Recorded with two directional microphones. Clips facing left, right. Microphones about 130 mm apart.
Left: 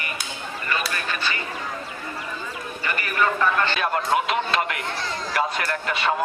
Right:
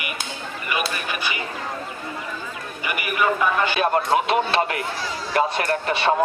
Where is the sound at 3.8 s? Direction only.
30° right (ahead or behind).